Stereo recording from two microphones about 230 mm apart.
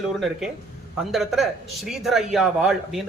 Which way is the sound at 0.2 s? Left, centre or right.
Centre.